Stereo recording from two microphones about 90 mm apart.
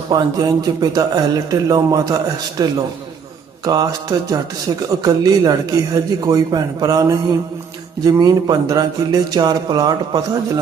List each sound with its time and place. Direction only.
0.1 s speech: 50° right (ahead or behind)